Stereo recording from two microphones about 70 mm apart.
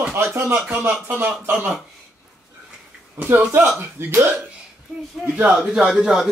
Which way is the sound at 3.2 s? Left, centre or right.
Right.